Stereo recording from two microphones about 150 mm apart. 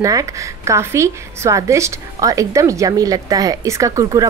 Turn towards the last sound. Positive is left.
turn(degrees=-25)  # may be behind; listen again after turning